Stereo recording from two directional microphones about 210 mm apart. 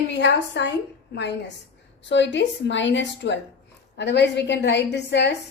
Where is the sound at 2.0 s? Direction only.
60° left (ahead or behind).